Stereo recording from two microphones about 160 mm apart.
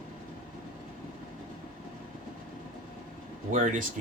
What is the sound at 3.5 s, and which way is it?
Speech, 55° right (ahead or behind).